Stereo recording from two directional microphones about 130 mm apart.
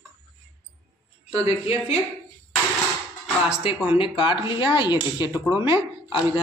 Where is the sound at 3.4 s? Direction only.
50° left (ahead or behind).